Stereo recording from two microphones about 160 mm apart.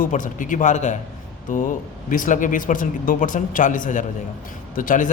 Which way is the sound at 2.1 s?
55° left (ahead or behind).